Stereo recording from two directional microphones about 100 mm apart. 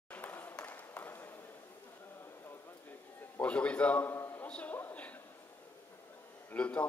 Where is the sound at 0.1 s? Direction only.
20° left (ahead or behind).